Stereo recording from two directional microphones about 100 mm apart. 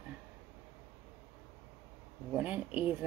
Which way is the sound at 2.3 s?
15° right (ahead or behind).